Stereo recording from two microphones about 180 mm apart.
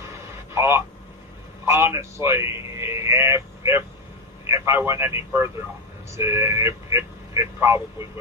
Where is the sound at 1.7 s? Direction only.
15° right (ahead or behind).